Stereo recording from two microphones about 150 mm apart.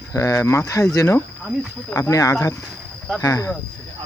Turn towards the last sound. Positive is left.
turn(degrees=20)  # may be behind; listen again after turning